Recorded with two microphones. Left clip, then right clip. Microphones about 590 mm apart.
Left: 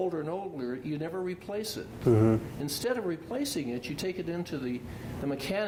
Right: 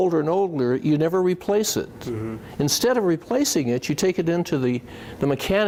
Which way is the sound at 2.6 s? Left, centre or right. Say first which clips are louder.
Right 11 dB; right.